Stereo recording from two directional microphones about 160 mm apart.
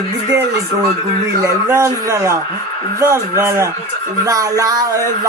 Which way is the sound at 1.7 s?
15° right (ahead or behind).